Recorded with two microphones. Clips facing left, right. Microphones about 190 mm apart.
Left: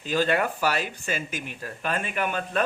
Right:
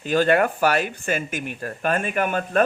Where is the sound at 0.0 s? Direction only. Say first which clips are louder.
Right 5 dB; 55° right (ahead or behind).